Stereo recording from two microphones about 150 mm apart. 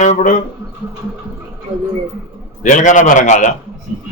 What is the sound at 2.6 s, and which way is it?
Speech, 55° left (ahead or behind).